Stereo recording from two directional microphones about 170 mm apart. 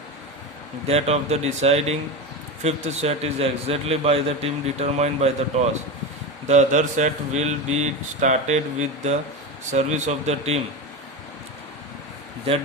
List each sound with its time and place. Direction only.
0.9 s a man's voice: 35° right (ahead or behind)